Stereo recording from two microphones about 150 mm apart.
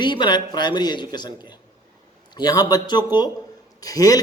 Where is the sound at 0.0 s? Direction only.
30° left (ahead or behind).